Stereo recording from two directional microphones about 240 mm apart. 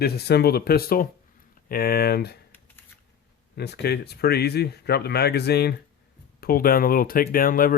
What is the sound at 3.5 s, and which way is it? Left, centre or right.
Speech, left.